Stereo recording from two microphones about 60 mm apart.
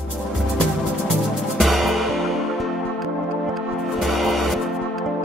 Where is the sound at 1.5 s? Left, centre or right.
Centre.